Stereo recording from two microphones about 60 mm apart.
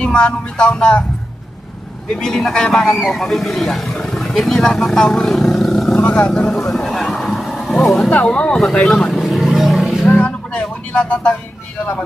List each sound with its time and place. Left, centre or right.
0.0 s speech: centre
2.1 s speech: centre
5.9 s speech: centre
6.9 s vehicle: centre
8.1 s speech: left
8.5 s speech: centre
9.1 s roaring cats: centre
10.0 s speech: centre